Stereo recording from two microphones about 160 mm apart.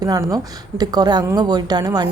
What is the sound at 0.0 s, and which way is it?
A woman's voice, 20° right (ahead or behind).